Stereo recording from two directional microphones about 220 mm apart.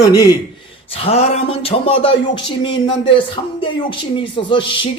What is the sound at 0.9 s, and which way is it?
A man's voice, 25° left (ahead or behind).